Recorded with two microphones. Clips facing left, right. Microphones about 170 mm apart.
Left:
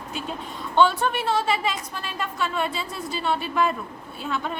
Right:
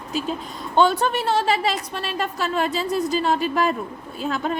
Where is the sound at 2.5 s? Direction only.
40° right (ahead or behind).